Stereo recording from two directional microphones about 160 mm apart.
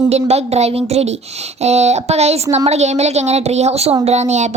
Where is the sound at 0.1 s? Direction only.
40° right (ahead or behind).